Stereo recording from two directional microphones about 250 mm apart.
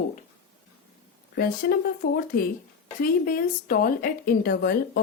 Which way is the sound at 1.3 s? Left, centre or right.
Left.